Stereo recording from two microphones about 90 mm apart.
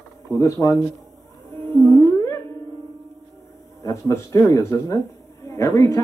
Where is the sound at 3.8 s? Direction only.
35° left (ahead or behind).